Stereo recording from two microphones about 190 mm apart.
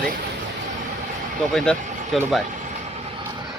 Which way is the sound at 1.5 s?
5° left (ahead or behind).